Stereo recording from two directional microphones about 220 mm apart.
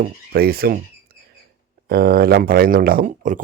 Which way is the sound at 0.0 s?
45° right (ahead or behind).